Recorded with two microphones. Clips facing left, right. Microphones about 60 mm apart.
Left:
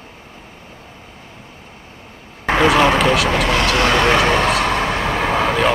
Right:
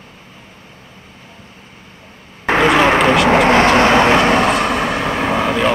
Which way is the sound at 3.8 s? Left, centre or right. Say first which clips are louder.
Right 4 dB; right.